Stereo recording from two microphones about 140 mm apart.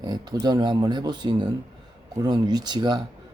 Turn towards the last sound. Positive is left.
turn(degrees=-30)  # may be behind; listen again after turning